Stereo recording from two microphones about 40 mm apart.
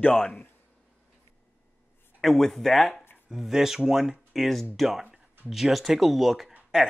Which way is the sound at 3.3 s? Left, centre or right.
Centre.